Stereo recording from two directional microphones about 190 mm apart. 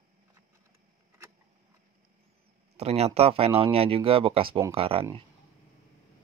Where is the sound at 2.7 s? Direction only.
35° right (ahead or behind).